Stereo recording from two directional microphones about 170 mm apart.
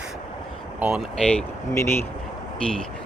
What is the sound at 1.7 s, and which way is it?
Speech, 15° left (ahead or behind).